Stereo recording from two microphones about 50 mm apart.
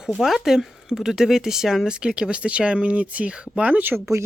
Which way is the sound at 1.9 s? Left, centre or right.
Centre.